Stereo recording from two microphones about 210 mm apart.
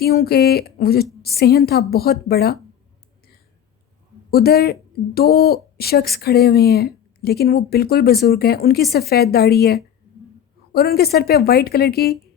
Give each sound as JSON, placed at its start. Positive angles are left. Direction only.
{"t": 0.0, "sound": "speech", "side_deg": 50}
{"t": 4.3, "sound": "speech", "side_deg": 50}